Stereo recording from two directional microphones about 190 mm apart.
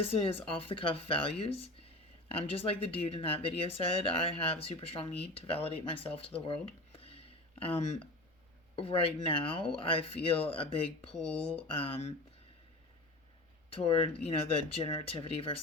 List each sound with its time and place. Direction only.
0.1 s speech: 30° left (ahead or behind)
8.7 s speech: 30° left (ahead or behind)
13.7 s speech: 30° left (ahead or behind)